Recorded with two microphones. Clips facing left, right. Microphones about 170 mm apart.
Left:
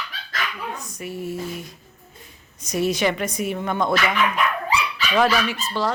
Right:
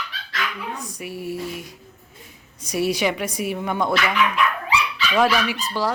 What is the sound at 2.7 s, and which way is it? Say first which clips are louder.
Speech: even; 10° right (ahead or behind).